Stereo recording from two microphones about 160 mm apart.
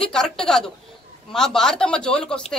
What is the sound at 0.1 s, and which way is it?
Speech, 5° left (ahead or behind).